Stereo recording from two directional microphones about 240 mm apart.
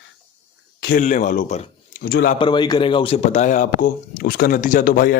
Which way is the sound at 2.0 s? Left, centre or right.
Left.